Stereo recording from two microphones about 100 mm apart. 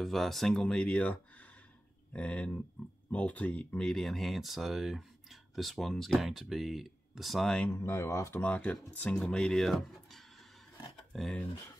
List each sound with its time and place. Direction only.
0.0 s speech: centre (ahead or behind)
7.7 s speech: 25° left (ahead or behind)
8.4 s speech: 15° left (ahead or behind)